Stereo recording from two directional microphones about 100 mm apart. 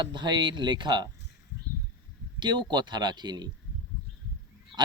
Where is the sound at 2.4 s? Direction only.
50° right (ahead or behind).